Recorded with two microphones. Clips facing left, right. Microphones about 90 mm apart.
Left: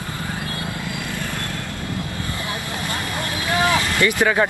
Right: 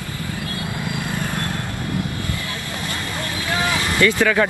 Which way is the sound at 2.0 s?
25° left (ahead or behind).